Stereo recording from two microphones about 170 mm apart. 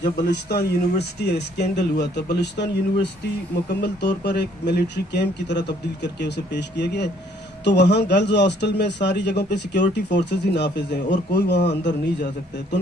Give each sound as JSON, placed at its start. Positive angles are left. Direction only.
{"t": 0.3, "sound": "speech", "side_deg": 75}
{"t": 3.8, "sound": "a man's voice", "side_deg": 80}